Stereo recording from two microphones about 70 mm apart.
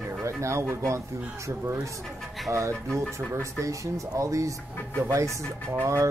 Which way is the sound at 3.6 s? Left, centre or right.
Right.